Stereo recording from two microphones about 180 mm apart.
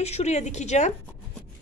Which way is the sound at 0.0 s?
40° left (ahead or behind).